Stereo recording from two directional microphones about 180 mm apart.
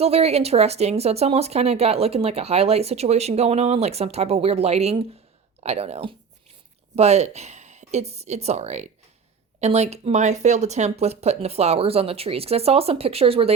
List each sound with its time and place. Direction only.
0.0 s speech: 35° right (ahead or behind)